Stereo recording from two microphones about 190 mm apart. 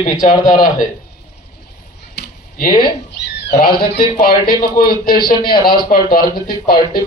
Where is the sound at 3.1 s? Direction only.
60° left (ahead or behind).